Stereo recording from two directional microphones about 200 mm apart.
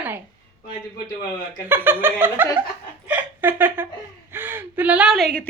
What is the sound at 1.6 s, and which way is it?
A woman's voice, 10° right (ahead or behind).